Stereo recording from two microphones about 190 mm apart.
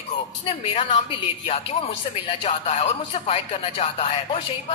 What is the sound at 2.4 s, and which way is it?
A woman's voice, 30° left (ahead or behind).